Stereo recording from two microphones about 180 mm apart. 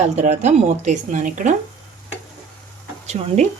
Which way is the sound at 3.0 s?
40° right (ahead or behind).